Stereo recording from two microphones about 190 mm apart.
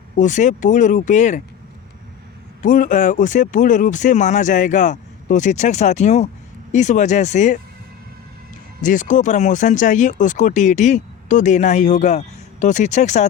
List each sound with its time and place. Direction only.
0.2 s speech: 40° left (ahead or behind)
2.6 s speech: 45° left (ahead or behind)
8.8 s speech: 40° left (ahead or behind)